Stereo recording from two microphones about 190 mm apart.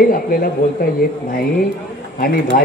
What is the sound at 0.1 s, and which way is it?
Speech, 50° left (ahead or behind).